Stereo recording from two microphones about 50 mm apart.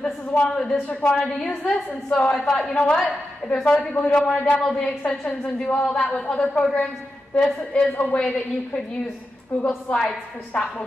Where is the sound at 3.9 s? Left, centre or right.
Left.